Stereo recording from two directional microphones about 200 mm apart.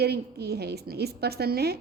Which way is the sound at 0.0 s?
55° right (ahead or behind).